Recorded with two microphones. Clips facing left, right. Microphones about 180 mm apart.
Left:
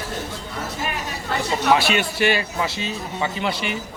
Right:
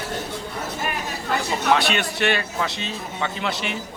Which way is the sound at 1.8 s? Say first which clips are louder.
Left 2 dB; centre (ahead or behind).